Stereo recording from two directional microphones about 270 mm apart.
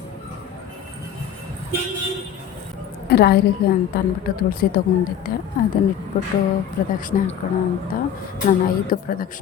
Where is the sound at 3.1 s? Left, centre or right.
Left.